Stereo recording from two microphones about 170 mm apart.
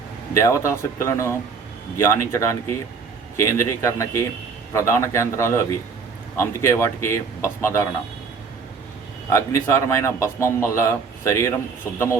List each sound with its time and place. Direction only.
0.3 s a man's voice: 15° left (ahead or behind)
9.3 s a man's voice: 15° left (ahead or behind)